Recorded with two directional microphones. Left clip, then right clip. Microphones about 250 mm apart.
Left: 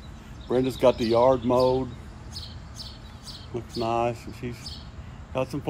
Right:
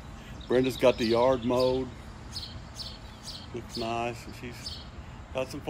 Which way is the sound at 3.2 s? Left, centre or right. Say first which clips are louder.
Left 4 dB; centre.